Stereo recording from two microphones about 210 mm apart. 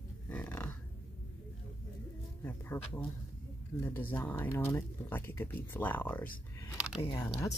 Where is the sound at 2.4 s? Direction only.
10° left (ahead or behind).